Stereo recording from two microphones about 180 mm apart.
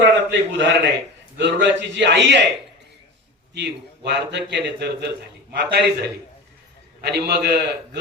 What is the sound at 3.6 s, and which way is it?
A man's voice, 70° right (ahead or behind).